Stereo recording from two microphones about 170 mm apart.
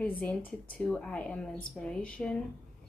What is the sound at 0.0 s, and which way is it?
Speech, 10° left (ahead or behind).